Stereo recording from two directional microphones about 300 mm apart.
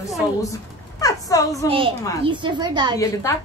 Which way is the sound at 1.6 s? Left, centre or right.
Centre.